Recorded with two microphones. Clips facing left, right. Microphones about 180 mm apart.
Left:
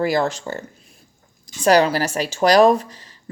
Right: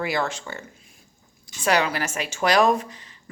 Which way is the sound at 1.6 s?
35° left (ahead or behind).